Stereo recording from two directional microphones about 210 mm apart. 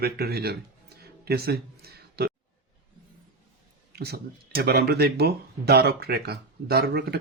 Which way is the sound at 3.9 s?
50° right (ahead or behind).